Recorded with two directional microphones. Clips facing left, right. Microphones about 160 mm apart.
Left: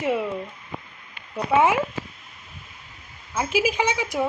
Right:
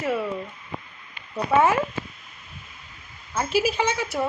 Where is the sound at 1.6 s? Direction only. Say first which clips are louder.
Even; 10° left (ahead or behind).